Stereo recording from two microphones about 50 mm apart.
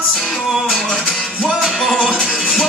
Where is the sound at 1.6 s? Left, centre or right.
Centre.